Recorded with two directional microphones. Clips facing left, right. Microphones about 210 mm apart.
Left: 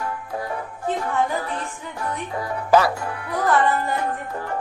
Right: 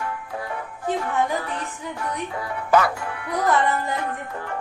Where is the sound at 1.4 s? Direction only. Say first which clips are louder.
Left 1 dB; 35° left (ahead or behind).